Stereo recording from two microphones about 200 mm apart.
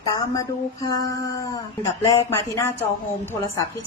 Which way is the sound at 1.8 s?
15° left (ahead or behind).